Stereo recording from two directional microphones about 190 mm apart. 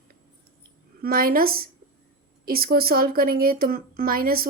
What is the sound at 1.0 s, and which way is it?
Speech, 50° right (ahead or behind).